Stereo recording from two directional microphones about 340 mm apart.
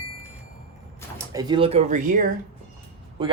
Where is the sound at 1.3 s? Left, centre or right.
Centre.